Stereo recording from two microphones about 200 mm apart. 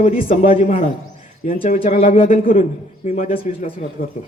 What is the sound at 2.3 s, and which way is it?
A man's voice, 45° left (ahead or behind).